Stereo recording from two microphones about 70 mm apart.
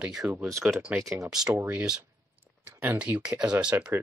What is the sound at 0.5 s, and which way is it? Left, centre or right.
Speech, centre.